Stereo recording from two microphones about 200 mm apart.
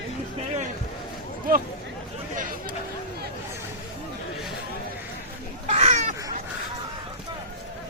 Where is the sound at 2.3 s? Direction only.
40° right (ahead or behind).